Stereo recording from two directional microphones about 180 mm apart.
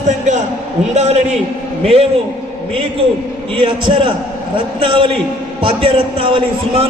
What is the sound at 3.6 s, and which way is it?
A man's voice, 30° right (ahead or behind).